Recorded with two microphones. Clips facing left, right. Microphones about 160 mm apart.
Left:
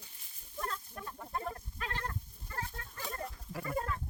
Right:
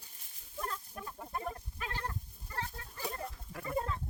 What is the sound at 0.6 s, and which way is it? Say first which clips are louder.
Goat: even; 10° right (ahead or behind).